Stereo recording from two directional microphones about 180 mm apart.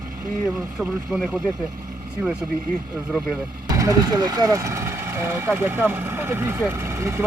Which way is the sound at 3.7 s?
20° right (ahead or behind).